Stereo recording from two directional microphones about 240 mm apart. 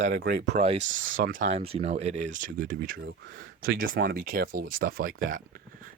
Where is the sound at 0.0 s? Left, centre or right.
Right.